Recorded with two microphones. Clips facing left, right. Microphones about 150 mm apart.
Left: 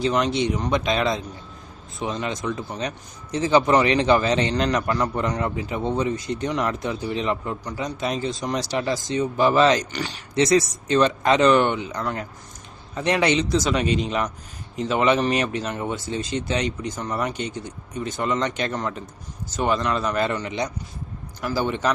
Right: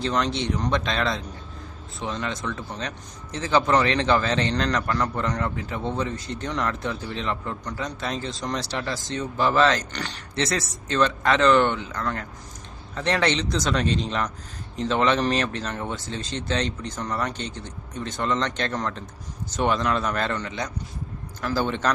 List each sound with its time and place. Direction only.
0.0 s a man's voice: 10° left (ahead or behind)